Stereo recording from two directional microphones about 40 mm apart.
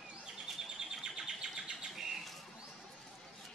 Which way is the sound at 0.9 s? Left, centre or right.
Centre.